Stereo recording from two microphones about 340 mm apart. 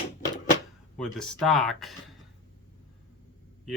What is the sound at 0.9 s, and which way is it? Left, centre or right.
Speech, centre.